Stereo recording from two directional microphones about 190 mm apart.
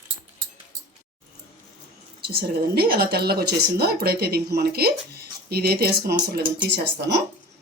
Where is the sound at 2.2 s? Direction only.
55° right (ahead or behind).